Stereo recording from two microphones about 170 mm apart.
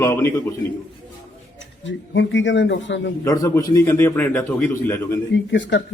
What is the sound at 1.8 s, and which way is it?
A man's voice, 90° left.